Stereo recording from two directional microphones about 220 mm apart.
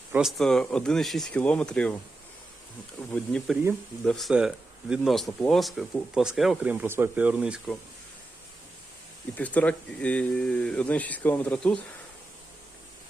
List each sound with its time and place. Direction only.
0.1 s speech: centre (ahead or behind)
3.1 s speech: centre (ahead or behind)
9.4 s speech: 5° left (ahead or behind)